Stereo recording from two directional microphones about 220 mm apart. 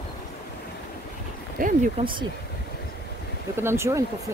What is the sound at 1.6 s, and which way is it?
Speech, 35° right (ahead or behind).